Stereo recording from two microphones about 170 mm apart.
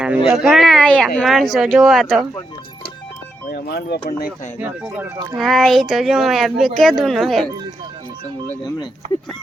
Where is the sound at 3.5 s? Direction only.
65° left (ahead or behind).